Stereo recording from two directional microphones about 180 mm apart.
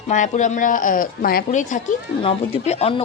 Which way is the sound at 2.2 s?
35° left (ahead or behind).